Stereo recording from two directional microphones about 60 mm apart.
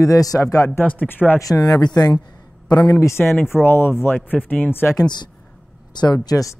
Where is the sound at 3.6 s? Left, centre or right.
Left.